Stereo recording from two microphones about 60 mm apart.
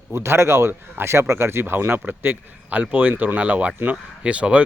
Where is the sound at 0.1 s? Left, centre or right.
Right.